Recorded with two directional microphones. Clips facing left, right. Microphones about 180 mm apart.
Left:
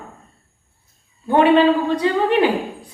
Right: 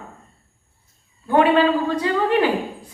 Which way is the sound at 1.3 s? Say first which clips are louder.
Left 3 dB; 25° left (ahead or behind).